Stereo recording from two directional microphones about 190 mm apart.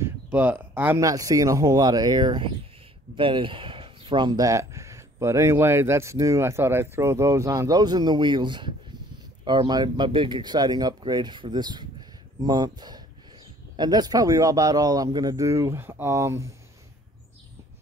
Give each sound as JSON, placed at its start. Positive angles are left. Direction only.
{"t": 0.0, "sound": "speech", "side_deg": -10}